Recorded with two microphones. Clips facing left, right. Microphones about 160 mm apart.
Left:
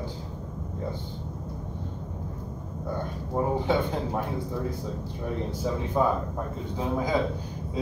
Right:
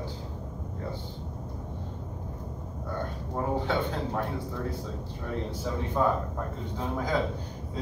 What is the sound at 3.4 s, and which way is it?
Speech, 15° left (ahead or behind).